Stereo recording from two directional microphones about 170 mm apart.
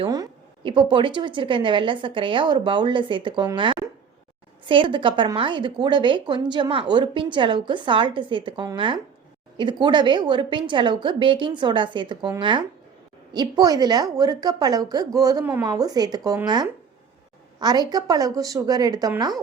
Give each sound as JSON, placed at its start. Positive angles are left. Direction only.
{"t": 0.0, "sound": "a woman's voice", "side_deg": -25}